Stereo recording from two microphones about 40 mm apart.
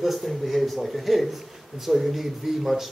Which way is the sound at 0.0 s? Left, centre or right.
Centre.